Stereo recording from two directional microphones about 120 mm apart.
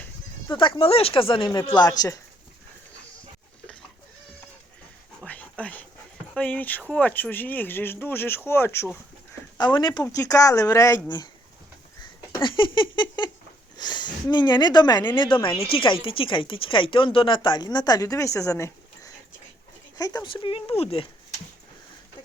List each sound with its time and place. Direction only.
0.4 s speech: 45° left (ahead or behind)
5.2 s dog: 10° left (ahead or behind)
6.3 s speech: 10° left (ahead or behind)
9.6 s speech: 40° left (ahead or behind)
10.0 s speech: 30° left (ahead or behind)
12.4 s speech: 40° left (ahead or behind)
20.2 s speech: 45° left (ahead or behind)